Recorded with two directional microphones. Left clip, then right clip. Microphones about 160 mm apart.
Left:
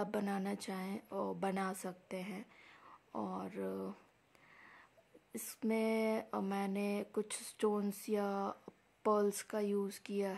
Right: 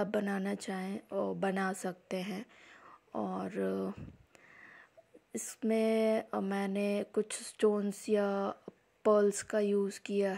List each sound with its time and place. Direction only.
0.0 s speech: 20° right (ahead or behind)
4.6 s a sound: 20° right (ahead or behind)
5.3 s speech: 20° right (ahead or behind)